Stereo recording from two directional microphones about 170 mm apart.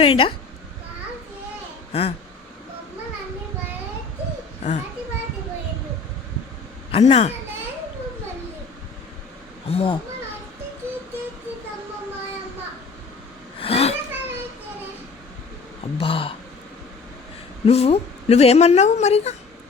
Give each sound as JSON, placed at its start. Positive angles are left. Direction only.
{"t": 0.0, "sound": "a woman's voice", "side_deg": 35}
{"t": 1.9, "sound": "speech", "side_deg": 35}
{"t": 4.6, "sound": "a woman's voice", "side_deg": 40}
{"t": 6.9, "sound": "a woman's voice", "side_deg": 40}
{"t": 9.6, "sound": "a woman's voice", "side_deg": 35}
{"t": 13.6, "sound": "vehicle", "side_deg": 35}
{"t": 16.0, "sound": "a woman's voice", "side_deg": 30}
{"t": 17.7, "sound": "a woman's voice", "side_deg": 35}